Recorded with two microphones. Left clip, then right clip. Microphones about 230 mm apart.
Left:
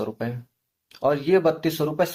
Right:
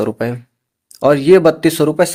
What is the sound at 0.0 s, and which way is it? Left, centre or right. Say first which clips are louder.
Speech: right 11 dB; right.